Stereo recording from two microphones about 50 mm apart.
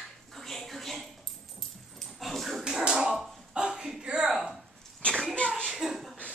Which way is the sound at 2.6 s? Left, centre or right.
Centre.